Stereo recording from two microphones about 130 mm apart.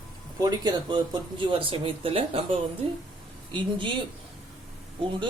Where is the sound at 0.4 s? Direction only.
30° right (ahead or behind).